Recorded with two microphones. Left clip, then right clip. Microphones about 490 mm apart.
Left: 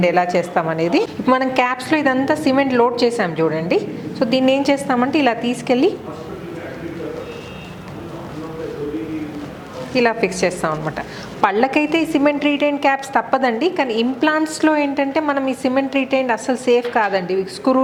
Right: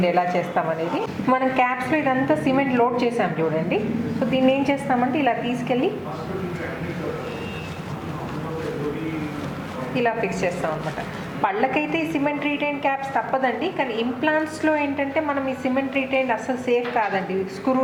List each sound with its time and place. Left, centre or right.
0.0 s a woman's voice: left
4.4 s a woman's voice: left
9.9 s a woman's voice: left